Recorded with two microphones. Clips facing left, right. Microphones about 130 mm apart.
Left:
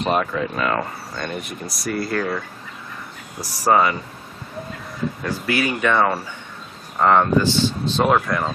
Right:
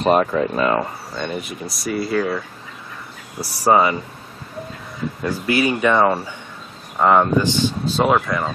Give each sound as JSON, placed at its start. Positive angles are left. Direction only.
{"t": 0.0, "sound": "speech", "side_deg": -40}
{"t": 0.6, "sound": "speech", "side_deg": -25}
{"t": 1.1, "sound": "speech", "side_deg": 0}
{"t": 5.6, "sound": "speech", "side_deg": -15}